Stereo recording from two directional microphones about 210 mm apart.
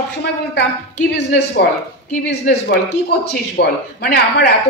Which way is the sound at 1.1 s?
55° left (ahead or behind).